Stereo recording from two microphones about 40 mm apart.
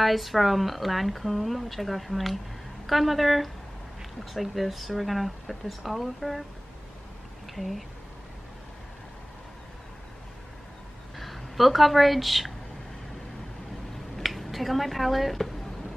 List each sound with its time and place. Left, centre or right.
0.0 s speech: centre
7.5 s speech: centre
11.1 s speech: centre
14.1 s speech: centre